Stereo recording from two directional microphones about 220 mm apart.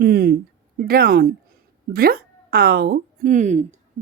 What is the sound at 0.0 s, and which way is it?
A woman's voice, 45° right (ahead or behind).